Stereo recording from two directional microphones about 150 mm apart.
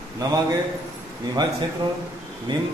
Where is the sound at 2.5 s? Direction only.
30° right (ahead or behind).